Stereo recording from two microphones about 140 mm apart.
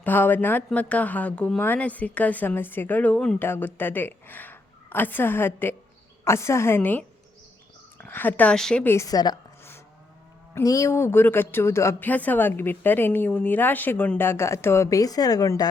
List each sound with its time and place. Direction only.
0.0 s a woman's voice: 15° left (ahead or behind)
8.0 s a woman's voice: 15° left (ahead or behind)
10.5 s a woman's voice: 25° left (ahead or behind)